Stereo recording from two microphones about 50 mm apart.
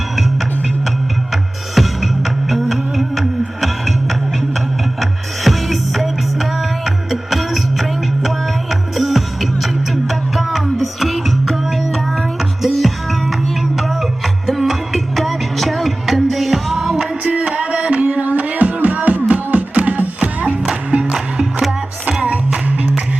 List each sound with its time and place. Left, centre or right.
1.3 s music: centre
17.2 s music: right
20.9 s music: centre